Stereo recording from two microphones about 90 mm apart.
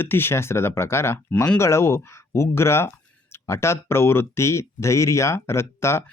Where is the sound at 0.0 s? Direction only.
25° left (ahead or behind).